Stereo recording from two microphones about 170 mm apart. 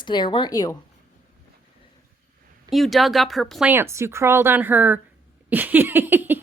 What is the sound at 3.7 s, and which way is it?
Speech, 15° right (ahead or behind).